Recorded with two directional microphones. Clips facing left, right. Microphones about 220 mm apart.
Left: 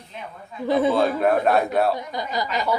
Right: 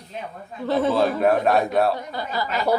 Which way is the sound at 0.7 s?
15° left (ahead or behind).